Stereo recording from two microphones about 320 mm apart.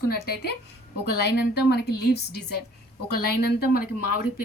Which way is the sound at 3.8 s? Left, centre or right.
Left.